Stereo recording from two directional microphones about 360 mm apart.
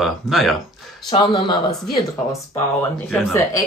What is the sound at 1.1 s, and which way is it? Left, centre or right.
Speech, centre.